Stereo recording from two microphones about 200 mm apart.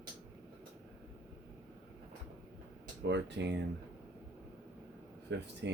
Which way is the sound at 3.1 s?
60° right (ahead or behind).